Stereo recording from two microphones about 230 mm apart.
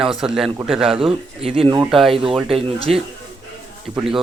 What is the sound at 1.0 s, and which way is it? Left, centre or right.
Speech, right.